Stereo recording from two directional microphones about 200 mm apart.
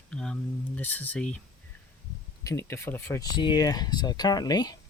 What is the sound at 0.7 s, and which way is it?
Speech, 10° left (ahead or behind).